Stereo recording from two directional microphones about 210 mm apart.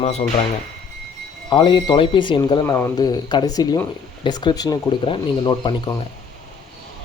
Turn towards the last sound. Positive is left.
turn(degrees=20)  # may be behind; listen again after turning